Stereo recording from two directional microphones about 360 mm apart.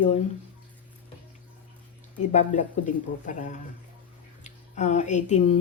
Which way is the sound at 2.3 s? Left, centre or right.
Left.